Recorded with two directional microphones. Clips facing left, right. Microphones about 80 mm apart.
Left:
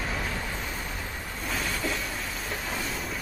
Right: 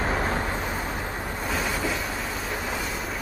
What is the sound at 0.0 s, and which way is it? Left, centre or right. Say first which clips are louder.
Vehicle: right 7 dB; right.